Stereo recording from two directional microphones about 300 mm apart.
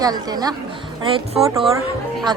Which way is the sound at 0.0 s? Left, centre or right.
Centre.